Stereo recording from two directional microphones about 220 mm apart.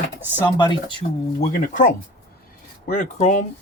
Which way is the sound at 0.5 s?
20° left (ahead or behind).